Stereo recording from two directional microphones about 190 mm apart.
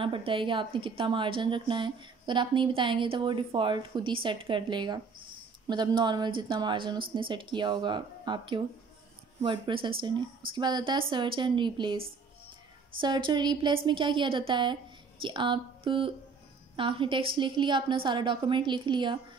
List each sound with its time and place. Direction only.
0.0 s a woman's voice: 25° right (ahead or behind)
13.0 s a woman's voice: 25° right (ahead or behind)